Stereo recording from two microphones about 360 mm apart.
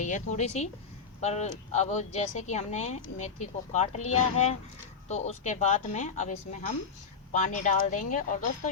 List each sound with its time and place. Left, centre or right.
0.0 s speech: centre
7.3 s speech: centre